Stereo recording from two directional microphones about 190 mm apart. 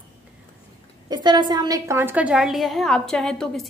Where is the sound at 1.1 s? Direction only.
25° right (ahead or behind).